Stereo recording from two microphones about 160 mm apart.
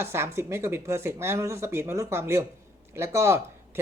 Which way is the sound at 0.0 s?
15° right (ahead or behind).